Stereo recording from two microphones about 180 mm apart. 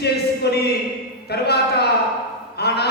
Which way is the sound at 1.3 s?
65° left (ahead or behind).